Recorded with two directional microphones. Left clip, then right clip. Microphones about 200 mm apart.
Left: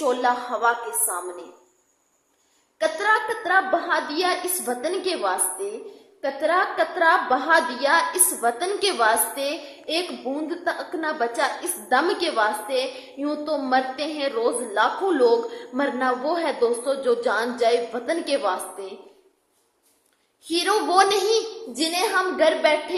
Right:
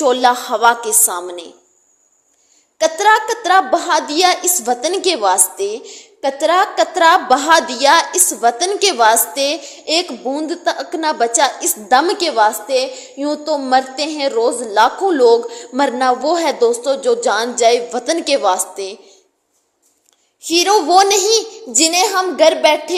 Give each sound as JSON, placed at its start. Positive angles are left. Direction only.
{"t": 0.0, "sound": "a woman's voice", "side_deg": -40}
{"t": 2.7, "sound": "a woman's voice", "side_deg": -35}
{"t": 20.4, "sound": "a woman's voice", "side_deg": -30}